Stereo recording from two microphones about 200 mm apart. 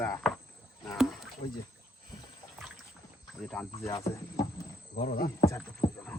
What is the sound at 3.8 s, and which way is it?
Speech, 15° left (ahead or behind).